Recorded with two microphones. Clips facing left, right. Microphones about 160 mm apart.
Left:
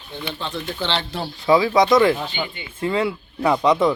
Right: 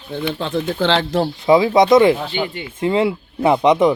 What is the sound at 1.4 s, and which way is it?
Speech, 20° right (ahead or behind).